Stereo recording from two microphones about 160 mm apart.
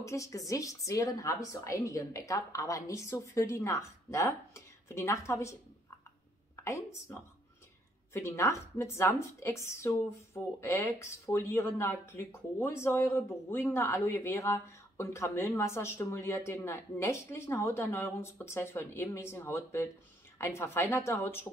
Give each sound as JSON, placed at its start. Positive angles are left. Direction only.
{"t": 0.0, "sound": "a woman's voice", "side_deg": 20}